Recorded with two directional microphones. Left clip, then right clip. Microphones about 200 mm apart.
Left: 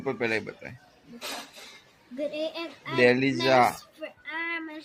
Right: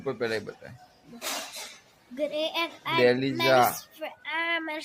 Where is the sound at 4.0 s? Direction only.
50° right (ahead or behind).